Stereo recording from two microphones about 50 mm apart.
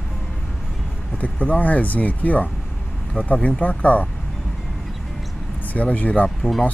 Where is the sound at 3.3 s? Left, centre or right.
Centre.